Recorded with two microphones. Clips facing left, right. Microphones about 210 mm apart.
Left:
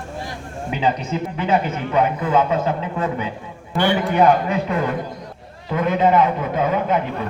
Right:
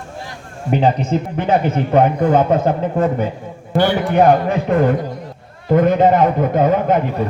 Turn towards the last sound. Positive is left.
turn(degrees=-50)  # may be behind; listen again after turning